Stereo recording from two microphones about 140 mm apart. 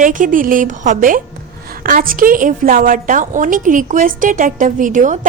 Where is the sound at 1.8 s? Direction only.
90° right.